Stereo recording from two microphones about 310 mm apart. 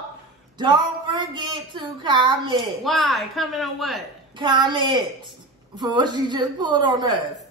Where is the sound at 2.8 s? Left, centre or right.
Centre.